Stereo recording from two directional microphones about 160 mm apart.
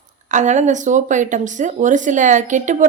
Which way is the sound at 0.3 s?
50° right (ahead or behind).